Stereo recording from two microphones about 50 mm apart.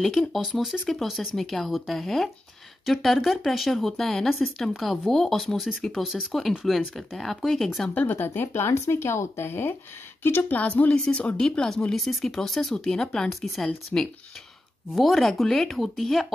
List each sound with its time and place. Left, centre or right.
0.5 s speech: centre
7.9 s speech: left
8.2 s speech: left
10.5 s speech: left; by 13.7 s centre
13.9 s speech: left
14.9 s speech: centre